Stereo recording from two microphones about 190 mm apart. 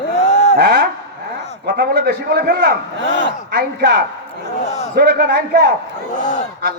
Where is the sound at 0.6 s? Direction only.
55° right (ahead or behind).